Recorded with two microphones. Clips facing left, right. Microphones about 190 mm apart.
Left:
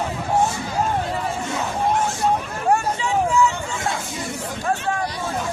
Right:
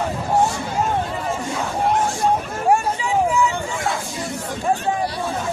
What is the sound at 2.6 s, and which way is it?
Vehicle, 15° right (ahead or behind).